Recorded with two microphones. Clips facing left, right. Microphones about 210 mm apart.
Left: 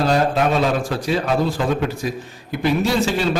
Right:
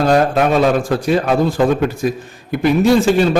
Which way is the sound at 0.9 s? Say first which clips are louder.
Right 5 dB; 50° right (ahead or behind).